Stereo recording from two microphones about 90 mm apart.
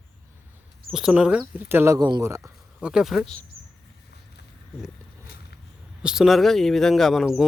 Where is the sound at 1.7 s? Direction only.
25° right (ahead or behind).